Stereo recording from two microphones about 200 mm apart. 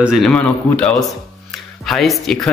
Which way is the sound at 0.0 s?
Centre (ahead or behind).